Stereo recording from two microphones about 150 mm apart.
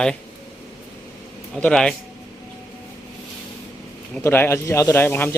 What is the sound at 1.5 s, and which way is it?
Speech, 5° left (ahead or behind).